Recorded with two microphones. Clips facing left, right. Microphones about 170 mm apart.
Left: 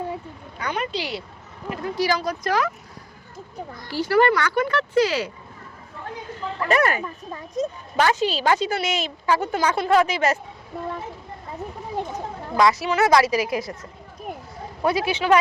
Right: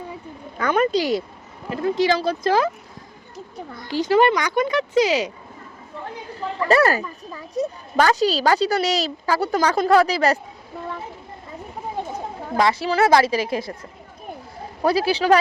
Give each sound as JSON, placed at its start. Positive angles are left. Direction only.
{"t": 0.6, "sound": "speech", "side_deg": -45}
{"t": 1.7, "sound": "a woman's voice", "side_deg": -25}
{"t": 3.8, "sound": "speech", "side_deg": -15}
{"t": 6.3, "sound": "a woman's voice", "side_deg": -35}
{"t": 12.5, "sound": "a woman's voice", "side_deg": -30}
{"t": 14.8, "sound": "a woman's voice", "side_deg": -35}